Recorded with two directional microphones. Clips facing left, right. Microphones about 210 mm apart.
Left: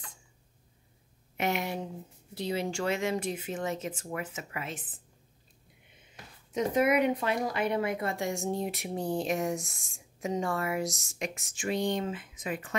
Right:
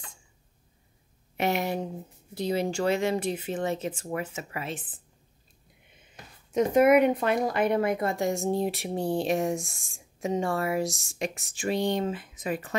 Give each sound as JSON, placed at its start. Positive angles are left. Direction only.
{"t": 1.3, "sound": "a woman's voice", "side_deg": -35}
{"t": 6.5, "sound": "a woman's voice", "side_deg": -50}